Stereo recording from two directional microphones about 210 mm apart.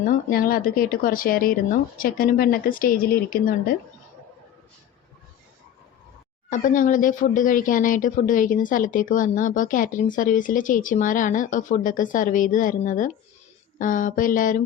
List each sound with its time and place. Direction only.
0.0 s speech: 40° left (ahead or behind)
6.5 s speech: 40° left (ahead or behind)